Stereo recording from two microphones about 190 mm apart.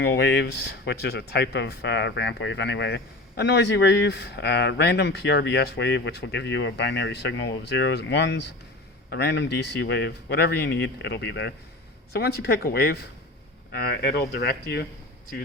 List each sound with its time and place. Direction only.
0.0 s speech: 60° left (ahead or behind)